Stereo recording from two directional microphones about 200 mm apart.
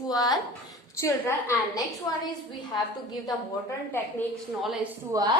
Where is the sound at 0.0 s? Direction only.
20° left (ahead or behind).